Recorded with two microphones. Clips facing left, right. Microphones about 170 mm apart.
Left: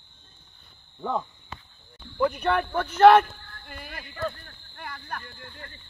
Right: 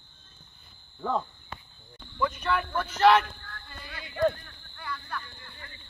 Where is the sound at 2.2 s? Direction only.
60° left (ahead or behind).